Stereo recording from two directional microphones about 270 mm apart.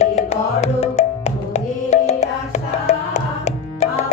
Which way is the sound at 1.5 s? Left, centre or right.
Left.